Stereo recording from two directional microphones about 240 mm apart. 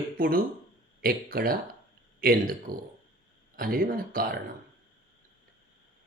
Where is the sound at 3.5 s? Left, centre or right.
Right.